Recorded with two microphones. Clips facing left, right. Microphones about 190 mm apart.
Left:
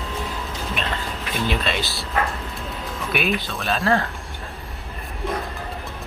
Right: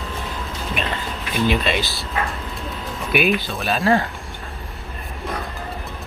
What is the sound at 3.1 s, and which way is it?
Speech, centre (ahead or behind).